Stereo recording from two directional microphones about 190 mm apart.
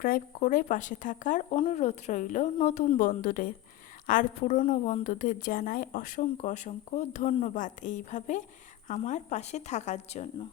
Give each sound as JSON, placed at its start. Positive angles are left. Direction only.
{"t": 0.0, "sound": "a woman's voice", "side_deg": 45}